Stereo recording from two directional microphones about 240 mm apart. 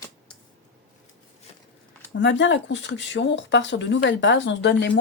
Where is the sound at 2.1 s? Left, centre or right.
Left.